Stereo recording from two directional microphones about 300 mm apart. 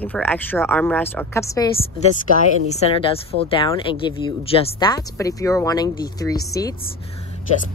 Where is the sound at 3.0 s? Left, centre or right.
Centre.